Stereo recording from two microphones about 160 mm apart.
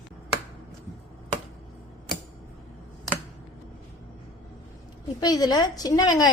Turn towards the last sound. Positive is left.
turn(degrees=25)  # may be behind; listen again after turning